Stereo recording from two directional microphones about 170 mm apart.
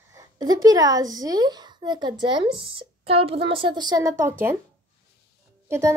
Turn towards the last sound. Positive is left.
turn(degrees=-15)  # may be behind; listen again after turning